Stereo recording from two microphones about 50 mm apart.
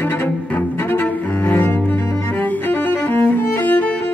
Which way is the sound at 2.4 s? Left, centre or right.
Left.